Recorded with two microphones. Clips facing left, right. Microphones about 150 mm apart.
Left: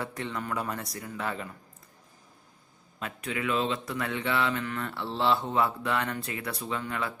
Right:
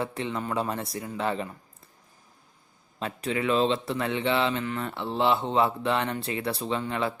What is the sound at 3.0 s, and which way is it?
Speech, 35° right (ahead or behind).